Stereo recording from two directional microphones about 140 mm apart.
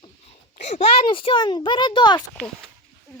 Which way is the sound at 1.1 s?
40° left (ahead or behind).